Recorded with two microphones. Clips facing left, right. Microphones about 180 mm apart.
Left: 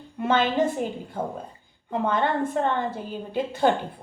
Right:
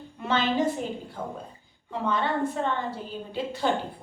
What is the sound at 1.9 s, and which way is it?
A woman's voice, 50° left (ahead or behind).